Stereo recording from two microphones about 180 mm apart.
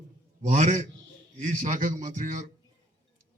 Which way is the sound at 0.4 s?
45° right (ahead or behind).